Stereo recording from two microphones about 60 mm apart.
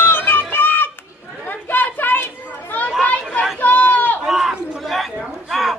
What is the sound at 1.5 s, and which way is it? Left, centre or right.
Chatter, left.